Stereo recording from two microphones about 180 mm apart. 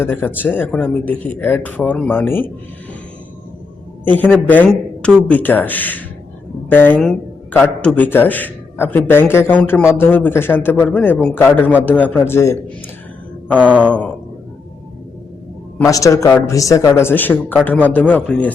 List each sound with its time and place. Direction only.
0.0 s a man's voice: 10° left (ahead or behind)
4.0 s a man's voice: 10° left (ahead or behind)
15.8 s a man's voice: 20° left (ahead or behind)